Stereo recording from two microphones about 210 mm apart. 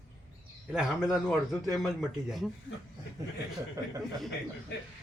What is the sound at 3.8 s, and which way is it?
Speech, 15° right (ahead or behind).